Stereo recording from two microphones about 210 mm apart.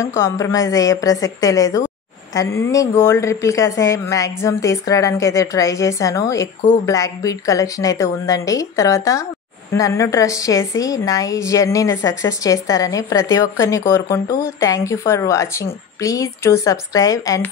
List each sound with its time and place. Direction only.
0.0 s a woman's voice: 15° left (ahead or behind)